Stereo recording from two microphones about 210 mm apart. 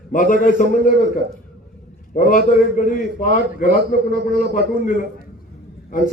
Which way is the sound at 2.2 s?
40° left (ahead or behind).